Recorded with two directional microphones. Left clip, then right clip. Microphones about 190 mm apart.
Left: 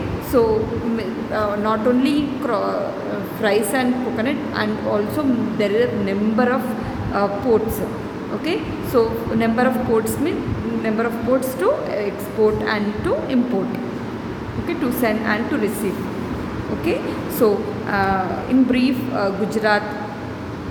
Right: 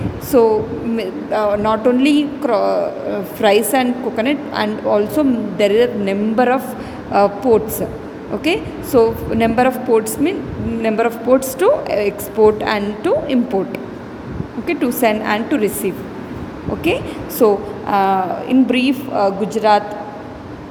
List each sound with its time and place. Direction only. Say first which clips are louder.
0.3 s a woman's voice: right 4 dB; 35° right (ahead or behind)
14.7 s a woman's voice: right 5 dB; 35° right (ahead or behind)
17.4 s a woman's voice: right 4 dB; 35° right (ahead or behind)